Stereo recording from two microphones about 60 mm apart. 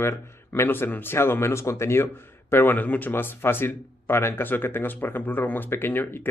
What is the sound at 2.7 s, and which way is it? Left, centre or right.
Speech, left.